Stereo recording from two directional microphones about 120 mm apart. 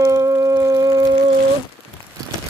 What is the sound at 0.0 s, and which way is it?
Shofar, 30° right (ahead or behind).